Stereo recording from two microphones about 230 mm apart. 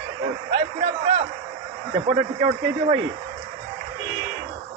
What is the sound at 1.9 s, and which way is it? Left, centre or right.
Speech, right.